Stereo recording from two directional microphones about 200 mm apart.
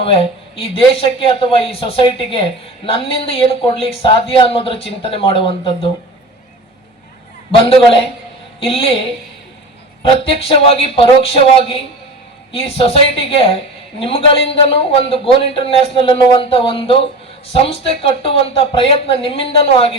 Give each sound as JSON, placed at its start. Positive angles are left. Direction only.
{"t": 0.0, "sound": "a man's voice", "side_deg": 30}
{"t": 7.5, "sound": "a man's voice", "side_deg": 30}
{"t": 10.0, "sound": "a man's voice", "side_deg": 30}